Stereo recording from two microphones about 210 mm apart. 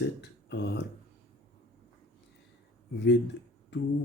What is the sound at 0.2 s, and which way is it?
Speech, 55° left (ahead or behind).